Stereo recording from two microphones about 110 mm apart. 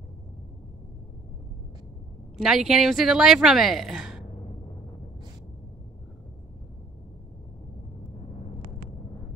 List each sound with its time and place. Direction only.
2.3 s speech: 5° right (ahead or behind)